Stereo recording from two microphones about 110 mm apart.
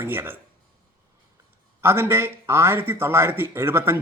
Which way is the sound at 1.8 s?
20° right (ahead or behind).